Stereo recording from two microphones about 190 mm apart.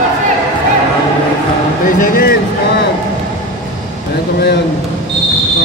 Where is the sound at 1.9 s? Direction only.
50° left (ahead or behind).